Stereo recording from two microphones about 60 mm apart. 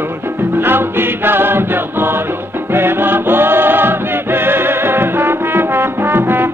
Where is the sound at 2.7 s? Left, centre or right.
Right.